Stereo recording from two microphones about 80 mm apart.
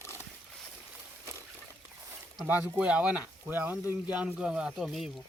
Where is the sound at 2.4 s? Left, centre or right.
Centre.